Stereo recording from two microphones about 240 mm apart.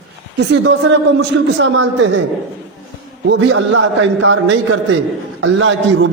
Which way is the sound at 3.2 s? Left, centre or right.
Right.